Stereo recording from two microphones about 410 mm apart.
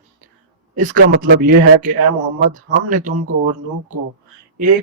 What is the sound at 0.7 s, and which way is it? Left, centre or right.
Speech, centre.